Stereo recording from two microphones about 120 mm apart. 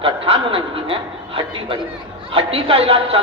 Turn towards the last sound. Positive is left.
turn(degrees=-50)  # may be behind; listen again after turning